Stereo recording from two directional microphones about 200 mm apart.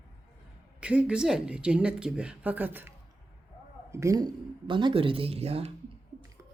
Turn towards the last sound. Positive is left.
turn(degrees=-30)  # may be behind; listen again after turning